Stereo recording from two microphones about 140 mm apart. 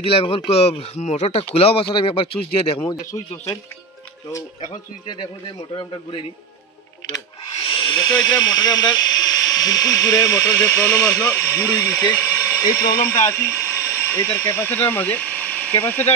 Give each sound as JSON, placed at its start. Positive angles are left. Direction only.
{"t": 0.0, "sound": "speech", "side_deg": 40}
{"t": 4.3, "sound": "speech", "side_deg": 25}
{"t": 5.0, "sound": "speech", "side_deg": 35}
{"t": 7.6, "sound": "speech", "side_deg": 35}